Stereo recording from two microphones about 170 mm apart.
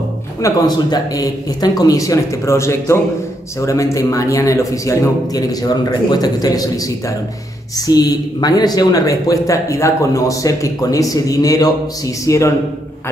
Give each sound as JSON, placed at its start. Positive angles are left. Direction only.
{"t": 0.4, "sound": "speech", "side_deg": 25}
{"t": 7.7, "sound": "a man's voice", "side_deg": 20}